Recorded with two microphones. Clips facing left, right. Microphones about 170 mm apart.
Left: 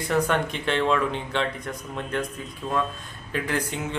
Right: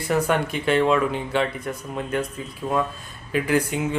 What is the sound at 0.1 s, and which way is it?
Speech, 10° right (ahead or behind).